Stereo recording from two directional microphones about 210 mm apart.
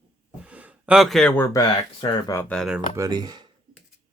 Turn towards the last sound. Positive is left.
turn(degrees=-20)  # may be behind; listen again after turning